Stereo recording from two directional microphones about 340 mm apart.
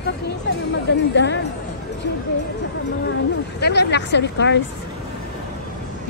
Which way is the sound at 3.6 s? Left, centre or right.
Left.